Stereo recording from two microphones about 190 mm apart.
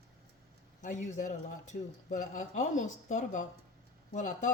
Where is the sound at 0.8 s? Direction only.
40° left (ahead or behind).